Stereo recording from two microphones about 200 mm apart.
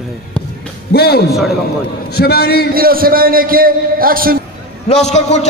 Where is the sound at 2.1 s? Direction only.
50° left (ahead or behind).